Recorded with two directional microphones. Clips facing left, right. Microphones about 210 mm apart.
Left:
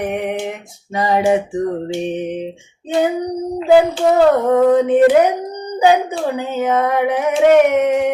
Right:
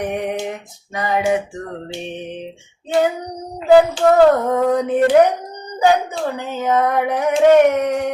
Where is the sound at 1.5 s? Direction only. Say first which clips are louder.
Left 9 dB; 20° left (ahead or behind).